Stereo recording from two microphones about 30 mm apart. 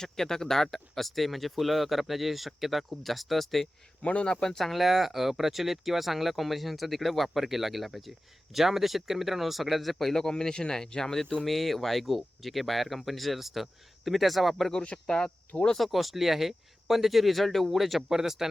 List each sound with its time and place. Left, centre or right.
0.0 s speech: centre
4.2 s speech: left
4.6 s speech: centre
10.2 s speech: left
11.4 s speech: centre
15.0 s speech: left
15.8 s speech: centre
18.1 s speech: centre